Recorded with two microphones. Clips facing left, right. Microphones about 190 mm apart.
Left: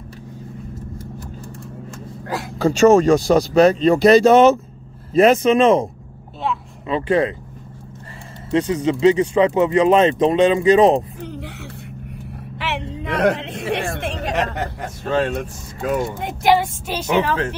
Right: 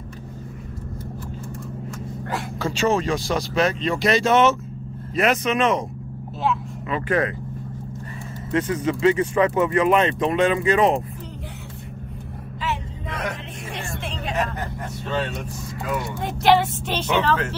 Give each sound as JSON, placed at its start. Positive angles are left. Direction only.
{"t": 2.3, "sound": "speech", "side_deg": 40}
{"t": 6.9, "sound": "speech", "side_deg": 25}
{"t": 8.6, "sound": "speech", "side_deg": 15}
{"t": 12.5, "sound": "vehicle", "side_deg": 75}
{"t": 14.3, "sound": "a sound", "side_deg": 80}
{"t": 15.0, "sound": "speech", "side_deg": 45}
{"t": 16.2, "sound": "a woman's voice", "side_deg": 15}